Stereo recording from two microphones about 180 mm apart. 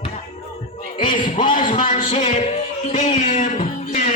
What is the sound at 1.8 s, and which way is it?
Music, 30° left (ahead or behind).